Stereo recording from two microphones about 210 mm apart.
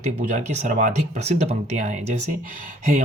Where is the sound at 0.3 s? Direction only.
35° right (ahead or behind).